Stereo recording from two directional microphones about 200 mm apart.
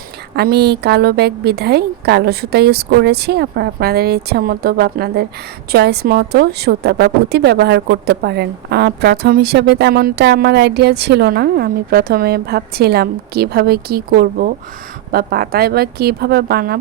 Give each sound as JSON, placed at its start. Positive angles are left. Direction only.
{"t": 0.3, "sound": "a woman's voice", "side_deg": -50}